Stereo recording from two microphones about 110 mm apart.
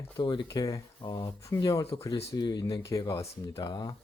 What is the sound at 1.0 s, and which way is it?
Speech, 40° left (ahead or behind).